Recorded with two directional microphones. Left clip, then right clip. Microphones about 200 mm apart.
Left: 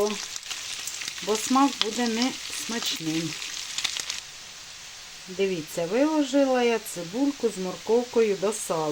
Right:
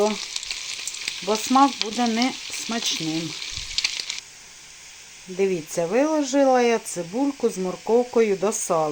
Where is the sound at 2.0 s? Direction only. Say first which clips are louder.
Right 4 dB; 5° right (ahead or behind).